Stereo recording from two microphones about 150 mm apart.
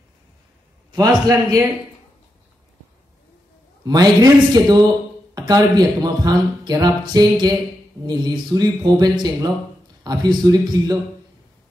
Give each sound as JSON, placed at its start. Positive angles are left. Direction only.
{"t": 0.9, "sound": "speech", "side_deg": -25}
{"t": 3.8, "sound": "speech", "side_deg": -25}